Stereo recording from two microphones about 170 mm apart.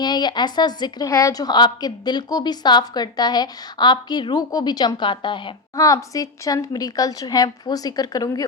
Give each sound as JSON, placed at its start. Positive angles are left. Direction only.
{"t": 0.0, "sound": "a woman's voice", "side_deg": 25}